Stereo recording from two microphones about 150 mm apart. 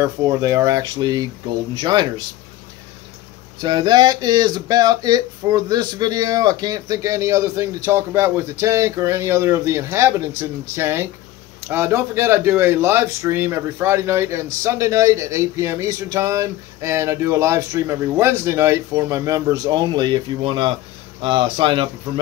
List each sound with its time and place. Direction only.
0.0 s speech: 20° right (ahead or behind)
3.5 s a man's voice: 30° right (ahead or behind)